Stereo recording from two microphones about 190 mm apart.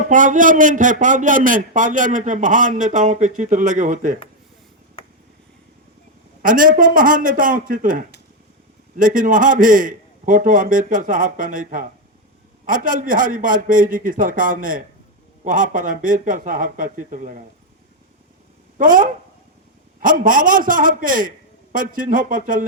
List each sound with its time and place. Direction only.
0.1 s a man's voice: 45° right (ahead or behind)
6.4 s a man's voice: 45° right (ahead or behind)
18.8 s a man's voice: 45° right (ahead or behind)